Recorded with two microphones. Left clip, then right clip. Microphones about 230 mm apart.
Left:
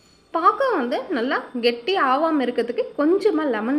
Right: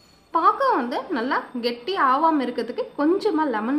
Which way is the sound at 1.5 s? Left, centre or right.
Right.